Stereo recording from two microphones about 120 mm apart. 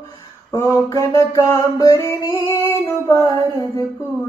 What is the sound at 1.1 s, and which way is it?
Singing, 25° left (ahead or behind).